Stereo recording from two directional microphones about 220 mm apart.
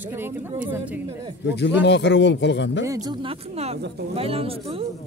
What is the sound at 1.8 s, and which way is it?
Speech, 55° left (ahead or behind).